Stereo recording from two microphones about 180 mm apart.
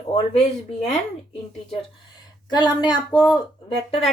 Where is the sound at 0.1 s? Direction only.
35° left (ahead or behind).